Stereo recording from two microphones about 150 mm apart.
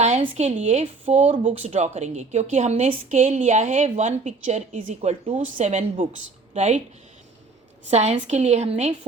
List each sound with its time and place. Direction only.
0.2 s speech: 45° right (ahead or behind)
7.9 s speech: 45° right (ahead or behind)